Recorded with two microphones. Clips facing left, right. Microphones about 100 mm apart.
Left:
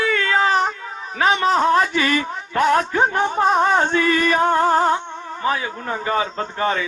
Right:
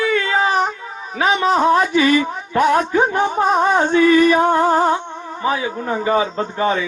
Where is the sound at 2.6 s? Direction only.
15° right (ahead or behind).